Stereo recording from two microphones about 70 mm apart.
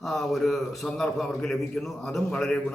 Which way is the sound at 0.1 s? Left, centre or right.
Centre.